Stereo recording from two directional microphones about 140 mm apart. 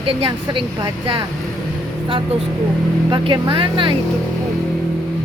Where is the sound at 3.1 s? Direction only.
35° right (ahead or behind).